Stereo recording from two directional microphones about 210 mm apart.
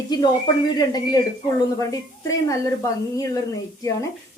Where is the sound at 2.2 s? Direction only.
15° left (ahead or behind).